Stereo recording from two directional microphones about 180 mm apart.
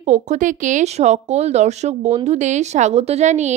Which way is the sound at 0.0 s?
40° right (ahead or behind).